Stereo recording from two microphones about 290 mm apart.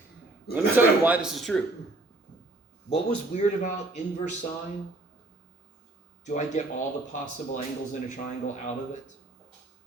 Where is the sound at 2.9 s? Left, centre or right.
Left.